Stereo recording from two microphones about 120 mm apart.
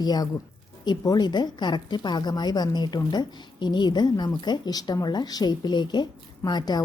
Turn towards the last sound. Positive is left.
turn(degrees=35)  # may be behind; listen again after turning